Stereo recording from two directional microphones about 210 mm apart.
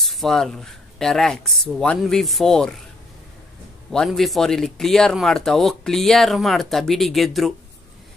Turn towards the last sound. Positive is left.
turn(degrees=0)  # may be behind; listen again after turning